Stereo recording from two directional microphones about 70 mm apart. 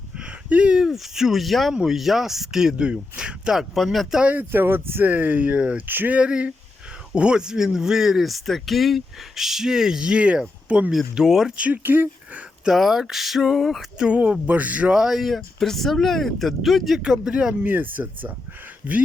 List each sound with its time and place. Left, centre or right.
0.2 s speech: centre
1.7 s speech: centre
4.2 s speech: right
10.9 s speech: centre
11.5 s speech: right
12.6 s speech: centre
14.1 s speech: centre
17.0 s speech: centre
17.6 s speech: right